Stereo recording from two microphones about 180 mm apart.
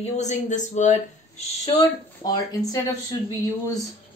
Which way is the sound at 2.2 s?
20° left (ahead or behind).